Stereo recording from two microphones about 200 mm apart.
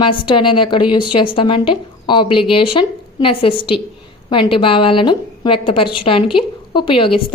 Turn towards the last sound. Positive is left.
turn(degrees=25)  # may be behind; listen again after turning